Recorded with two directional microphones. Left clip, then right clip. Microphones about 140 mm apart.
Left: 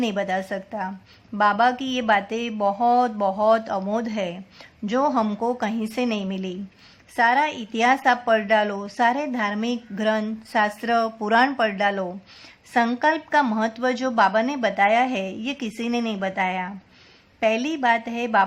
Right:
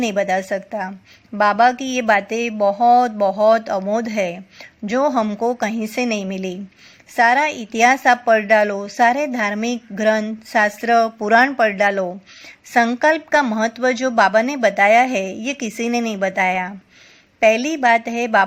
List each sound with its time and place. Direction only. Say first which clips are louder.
0.0 s a woman's voice: right 6 dB; 30° right (ahead or behind)